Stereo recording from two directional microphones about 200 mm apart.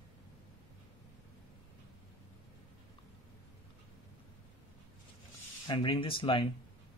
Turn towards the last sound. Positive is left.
turn(degrees=25)  # may be behind; listen again after turning